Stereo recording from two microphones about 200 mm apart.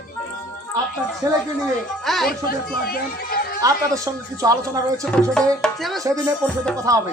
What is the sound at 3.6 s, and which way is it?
Speech, 15° right (ahead or behind).